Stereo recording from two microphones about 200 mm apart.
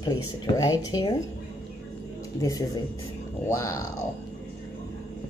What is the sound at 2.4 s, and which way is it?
Speech, 15° left (ahead or behind).